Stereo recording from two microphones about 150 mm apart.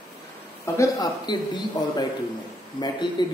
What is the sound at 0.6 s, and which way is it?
Speech, 25° left (ahead or behind).